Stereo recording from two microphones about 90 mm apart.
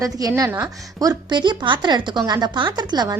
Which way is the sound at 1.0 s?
55° right (ahead or behind).